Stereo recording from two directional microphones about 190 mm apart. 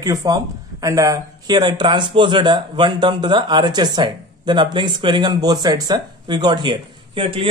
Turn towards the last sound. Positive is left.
turn(degrees=-30)  # may be behind; listen again after turning